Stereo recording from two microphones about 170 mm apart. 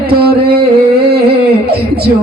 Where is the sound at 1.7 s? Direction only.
70° right (ahead or behind).